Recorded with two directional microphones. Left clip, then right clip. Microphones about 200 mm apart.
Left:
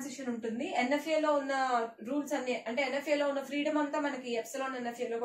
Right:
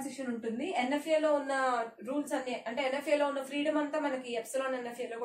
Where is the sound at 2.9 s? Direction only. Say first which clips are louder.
Right 2 dB; 20° right (ahead or behind).